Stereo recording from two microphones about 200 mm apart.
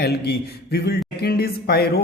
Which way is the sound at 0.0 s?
55° left (ahead or behind).